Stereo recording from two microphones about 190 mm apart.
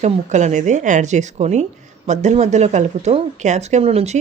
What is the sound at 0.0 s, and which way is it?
Speech, 40° right (ahead or behind).